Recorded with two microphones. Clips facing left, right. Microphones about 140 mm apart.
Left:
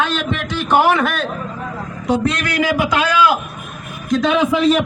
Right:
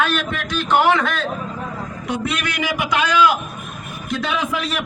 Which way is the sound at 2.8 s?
10° left (ahead or behind).